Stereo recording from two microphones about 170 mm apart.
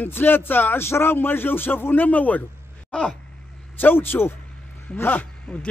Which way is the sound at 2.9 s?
5° left (ahead or behind).